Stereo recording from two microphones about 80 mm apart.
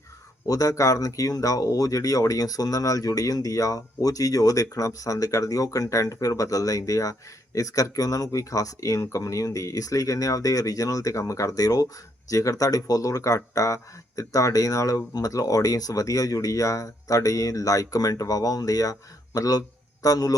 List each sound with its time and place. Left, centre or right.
0.4 s speech: left